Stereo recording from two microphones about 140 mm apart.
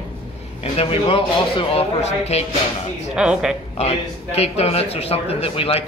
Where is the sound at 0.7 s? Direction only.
40° left (ahead or behind).